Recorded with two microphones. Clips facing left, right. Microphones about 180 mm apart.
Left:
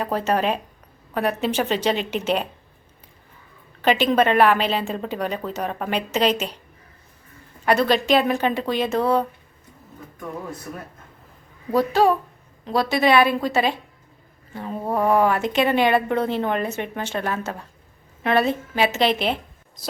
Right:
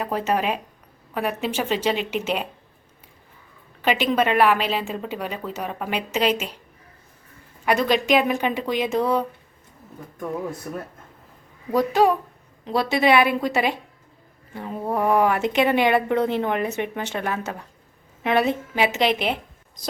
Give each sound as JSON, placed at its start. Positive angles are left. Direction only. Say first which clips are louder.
{"t": 0.0, "sound": "a woman's voice", "louder": "left 1 dB", "side_deg": -10}
{"t": 3.8, "sound": "a woman's voice", "louder": "left 3 dB", "side_deg": -10}
{"t": 7.6, "sound": "a woman's voice", "louder": "left 2 dB", "side_deg": -10}
{"t": 12.6, "sound": "a woman's voice", "louder": "even", "side_deg": -20}